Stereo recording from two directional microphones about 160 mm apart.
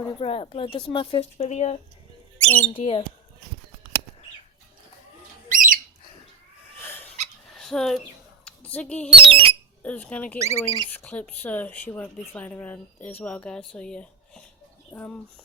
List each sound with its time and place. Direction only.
0.2 s speech: 35° left (ahead or behind)
2.4 s a sound: 10° left (ahead or behind)
2.7 s speech: 35° left (ahead or behind)
5.5 s bird: 60° right (ahead or behind)
6.7 s dog: 10° left (ahead or behind)
7.5 s a sound: 5° left (ahead or behind)
9.1 s speech: 35° right (ahead or behind)
9.8 s a woman's voice: 10° left (ahead or behind)
10.4 s speech: 20° right (ahead or behind)
10.9 s a woman's voice: 10° left (ahead or behind)